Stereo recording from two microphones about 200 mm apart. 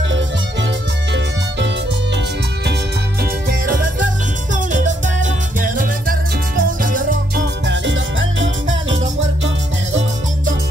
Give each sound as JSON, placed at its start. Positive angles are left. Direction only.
{"t": 2.6, "sound": "music", "side_deg": -55}
{"t": 7.6, "sound": "music", "side_deg": -65}